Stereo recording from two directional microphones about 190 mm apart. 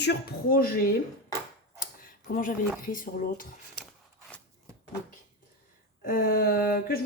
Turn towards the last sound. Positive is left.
turn(degrees=50)  # may be behind; listen again after turning